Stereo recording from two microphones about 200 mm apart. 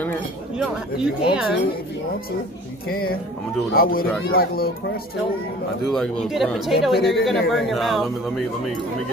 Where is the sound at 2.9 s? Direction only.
50° left (ahead or behind).